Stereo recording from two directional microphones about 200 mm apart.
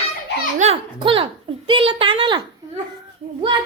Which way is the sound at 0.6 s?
30° right (ahead or behind).